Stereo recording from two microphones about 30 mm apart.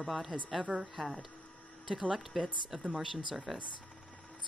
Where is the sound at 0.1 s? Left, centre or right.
Centre.